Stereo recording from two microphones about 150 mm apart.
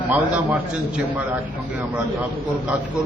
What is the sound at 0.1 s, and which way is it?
Speech, 10° right (ahead or behind).